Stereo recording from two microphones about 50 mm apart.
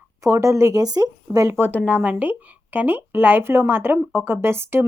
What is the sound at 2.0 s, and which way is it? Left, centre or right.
Speech, right.